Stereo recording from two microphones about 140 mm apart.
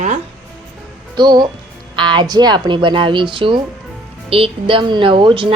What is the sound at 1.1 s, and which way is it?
A woman's voice, 30° right (ahead or behind).